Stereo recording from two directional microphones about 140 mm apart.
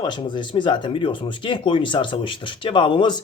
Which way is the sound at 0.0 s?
35° left (ahead or behind).